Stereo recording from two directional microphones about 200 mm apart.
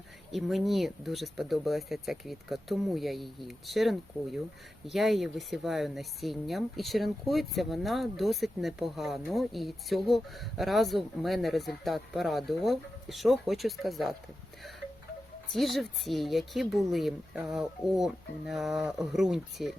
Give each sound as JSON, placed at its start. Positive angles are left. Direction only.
{"t": 0.3, "sound": "speech", "side_deg": 0}
{"t": 15.5, "sound": "speech", "side_deg": 0}